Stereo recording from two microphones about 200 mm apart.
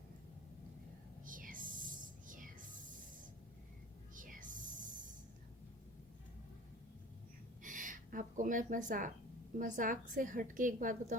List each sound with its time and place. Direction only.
1.2 s whispering: 45° right (ahead or behind)
4.1 s a sound: 40° right (ahead or behind)
7.6 s a woman's voice: 40° right (ahead or behind)